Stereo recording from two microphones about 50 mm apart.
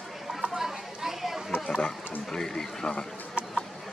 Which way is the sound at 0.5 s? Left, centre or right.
Centre.